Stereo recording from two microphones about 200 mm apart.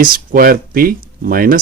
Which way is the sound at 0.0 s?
45° right (ahead or behind).